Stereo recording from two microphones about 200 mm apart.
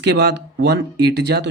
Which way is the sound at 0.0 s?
60° right (ahead or behind).